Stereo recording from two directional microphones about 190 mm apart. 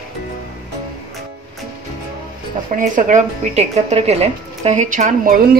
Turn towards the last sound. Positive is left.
turn(degrees=-45)  # may be behind; listen again after turning